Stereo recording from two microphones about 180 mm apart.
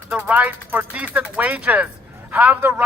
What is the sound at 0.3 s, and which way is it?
A man's voice, 10° right (ahead or behind).